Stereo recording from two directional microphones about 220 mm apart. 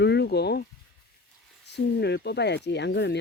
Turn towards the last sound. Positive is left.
turn(degrees=50)  # may be behind; listen again after turning